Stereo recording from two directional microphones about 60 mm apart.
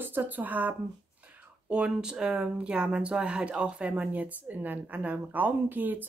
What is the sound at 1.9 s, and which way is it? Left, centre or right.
Speech, centre.